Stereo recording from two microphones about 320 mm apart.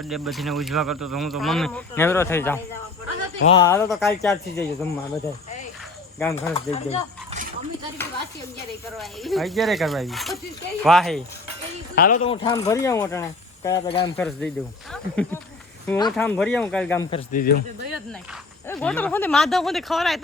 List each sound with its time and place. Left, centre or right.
0.1 s speech: centre
6.7 s speech: centre
9.0 s speech: centre
11.9 s speech: left
12.3 s speech: centre
14.2 s speech: centre
17.1 s speech: left
18.7 s speech: centre